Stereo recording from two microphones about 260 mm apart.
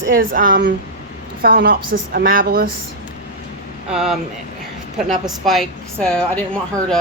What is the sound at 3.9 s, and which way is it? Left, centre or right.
Speech, centre.